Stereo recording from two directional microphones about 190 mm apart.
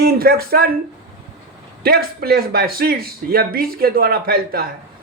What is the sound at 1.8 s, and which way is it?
A man's voice, 55° right (ahead or behind).